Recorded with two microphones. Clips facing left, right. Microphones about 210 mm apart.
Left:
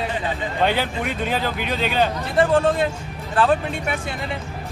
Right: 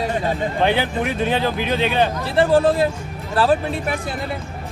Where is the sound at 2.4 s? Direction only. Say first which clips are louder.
Right 2 dB; 30° right (ahead or behind).